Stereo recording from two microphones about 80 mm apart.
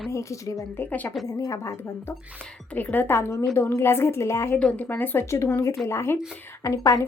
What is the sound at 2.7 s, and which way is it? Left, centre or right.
A woman's voice, left.